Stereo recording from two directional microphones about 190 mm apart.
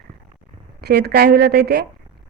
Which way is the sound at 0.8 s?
55° right (ahead or behind).